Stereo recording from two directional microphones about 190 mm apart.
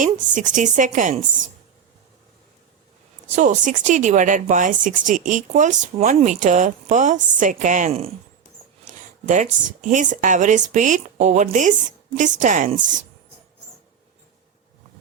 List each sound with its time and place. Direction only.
0.3 s speech: 40° right (ahead or behind)
3.3 s speech: 40° right (ahead or behind)